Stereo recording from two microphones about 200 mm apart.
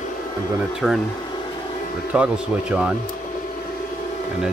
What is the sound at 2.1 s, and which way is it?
Speech, 5° right (ahead or behind).